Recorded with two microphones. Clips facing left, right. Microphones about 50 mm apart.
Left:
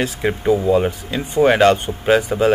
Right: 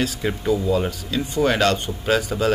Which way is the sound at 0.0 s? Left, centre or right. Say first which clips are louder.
Left 4 dB; left.